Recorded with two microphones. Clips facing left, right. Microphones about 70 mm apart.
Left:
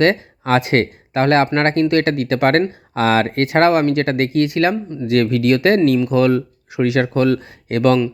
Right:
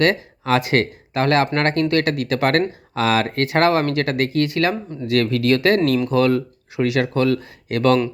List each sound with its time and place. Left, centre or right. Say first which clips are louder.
0.0 s speech: left 3 dB; left